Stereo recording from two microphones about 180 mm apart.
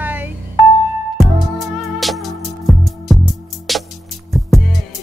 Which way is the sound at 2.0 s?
Centre (ahead or behind).